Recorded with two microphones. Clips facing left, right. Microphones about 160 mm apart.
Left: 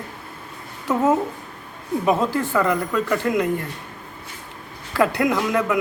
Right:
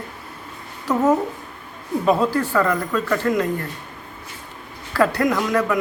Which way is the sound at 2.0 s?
20° left (ahead or behind).